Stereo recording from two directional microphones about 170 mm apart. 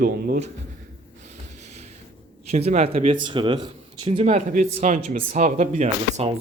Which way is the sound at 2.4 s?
40° right (ahead or behind).